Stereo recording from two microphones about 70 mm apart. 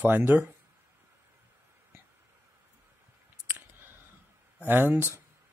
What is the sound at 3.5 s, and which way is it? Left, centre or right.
Clicking, right.